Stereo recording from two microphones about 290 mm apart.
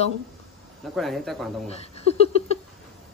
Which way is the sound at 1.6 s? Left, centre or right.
Left.